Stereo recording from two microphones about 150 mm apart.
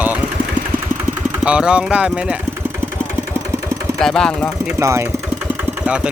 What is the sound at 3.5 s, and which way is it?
Engine, 20° right (ahead or behind).